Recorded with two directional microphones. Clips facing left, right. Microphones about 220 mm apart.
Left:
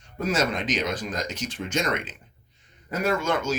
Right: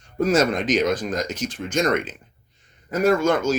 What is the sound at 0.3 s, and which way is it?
Speech, 50° right (ahead or behind).